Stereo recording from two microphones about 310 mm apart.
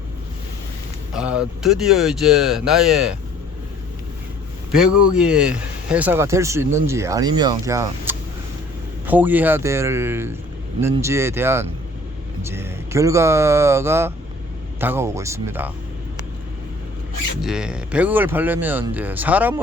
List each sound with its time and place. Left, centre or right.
1.1 s speech: centre
4.9 s speech: left
5.1 s speech: centre
17.4 s speech: centre